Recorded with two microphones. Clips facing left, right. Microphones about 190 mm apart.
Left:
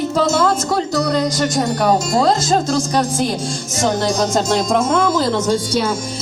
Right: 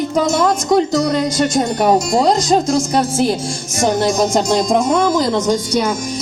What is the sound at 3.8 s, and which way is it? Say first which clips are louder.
Speech: right 3 dB; 20° right (ahead or behind).